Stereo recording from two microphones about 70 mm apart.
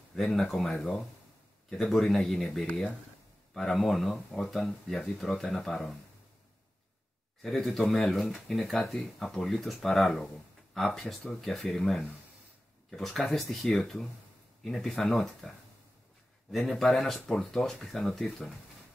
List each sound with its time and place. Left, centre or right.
0.1 s speech: centre
7.4 s speech: centre
16.5 s speech: centre